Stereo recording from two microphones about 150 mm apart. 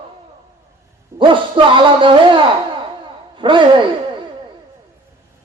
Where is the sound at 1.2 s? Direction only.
35° right (ahead or behind).